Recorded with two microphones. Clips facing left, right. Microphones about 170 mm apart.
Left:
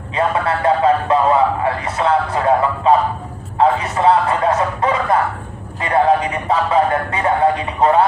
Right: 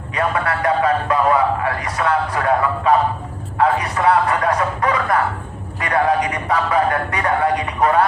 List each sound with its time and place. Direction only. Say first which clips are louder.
0.1 s a man's voice: left 3 dB; 25° left (ahead or behind)
3.6 s a sound: left 2 dB; 25° left (ahead or behind)
5.8 s speech: left 3 dB; 25° left (ahead or behind)